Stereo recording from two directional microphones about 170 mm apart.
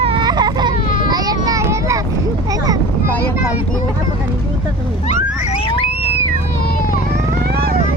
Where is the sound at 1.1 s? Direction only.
20° right (ahead or behind).